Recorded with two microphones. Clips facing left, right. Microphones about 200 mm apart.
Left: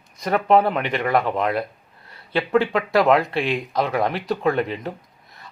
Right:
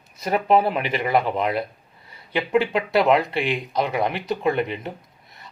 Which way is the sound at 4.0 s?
25° right (ahead or behind).